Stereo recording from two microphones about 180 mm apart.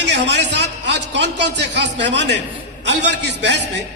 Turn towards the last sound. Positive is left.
turn(degrees=-75)  # may be behind; listen again after turning